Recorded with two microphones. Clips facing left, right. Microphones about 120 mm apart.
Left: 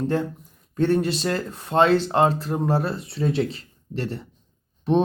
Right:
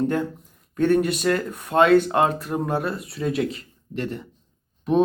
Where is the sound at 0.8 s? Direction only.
30° left (ahead or behind).